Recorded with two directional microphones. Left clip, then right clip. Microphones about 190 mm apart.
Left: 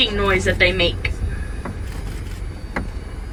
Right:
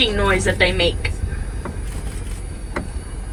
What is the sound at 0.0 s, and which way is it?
Speech, 30° right (ahead or behind).